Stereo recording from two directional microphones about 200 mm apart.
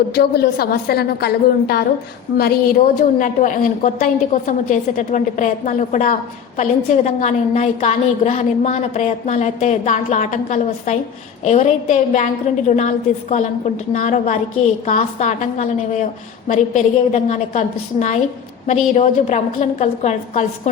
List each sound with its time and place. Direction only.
0.1 s a woman's voice: 50° left (ahead or behind)
13.9 s a woman's voice: 40° left (ahead or behind)